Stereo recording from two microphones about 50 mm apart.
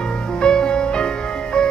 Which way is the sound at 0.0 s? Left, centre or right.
Centre.